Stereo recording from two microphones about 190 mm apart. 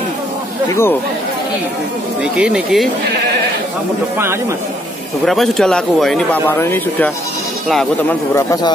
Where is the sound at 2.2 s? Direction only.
5° right (ahead or behind).